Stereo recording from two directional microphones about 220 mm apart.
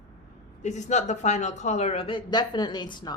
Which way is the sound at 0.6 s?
30° left (ahead or behind).